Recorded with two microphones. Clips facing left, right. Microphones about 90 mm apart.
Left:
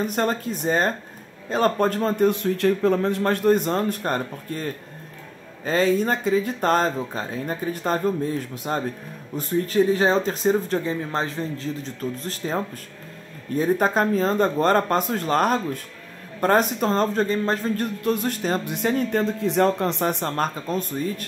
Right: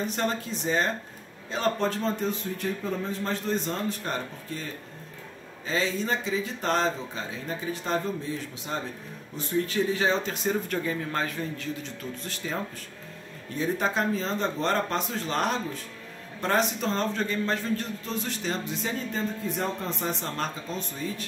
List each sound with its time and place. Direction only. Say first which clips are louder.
0.0 s speech: left 5 dB; 50° left (ahead or behind)
5.7 s speech: left 7 dB; 50° left (ahead or behind)
18.0 s speech: left 8 dB; 55° left (ahead or behind)